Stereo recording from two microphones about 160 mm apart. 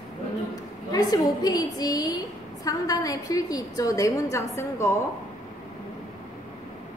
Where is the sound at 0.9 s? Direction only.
25° left (ahead or behind).